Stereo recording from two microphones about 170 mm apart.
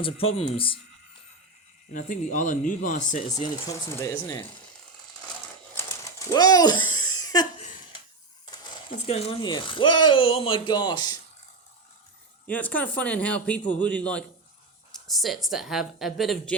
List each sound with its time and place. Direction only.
0.0 s speech: 35° left (ahead or behind)
1.9 s speech: 50° left (ahead or behind)
3.7 s a man's voice: 15° left (ahead or behind)
5.7 s a sound: 20° left (ahead or behind)
9.0 s speech: 30° left (ahead or behind)
12.5 s a man's voice: 10° left (ahead or behind)